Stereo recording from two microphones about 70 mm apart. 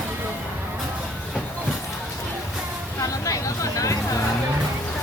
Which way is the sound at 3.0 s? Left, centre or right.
Left.